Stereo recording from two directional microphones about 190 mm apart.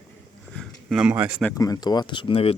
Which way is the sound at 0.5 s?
Centre (ahead or behind).